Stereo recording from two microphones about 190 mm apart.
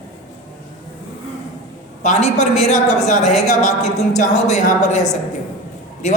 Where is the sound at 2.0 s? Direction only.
35° left (ahead or behind).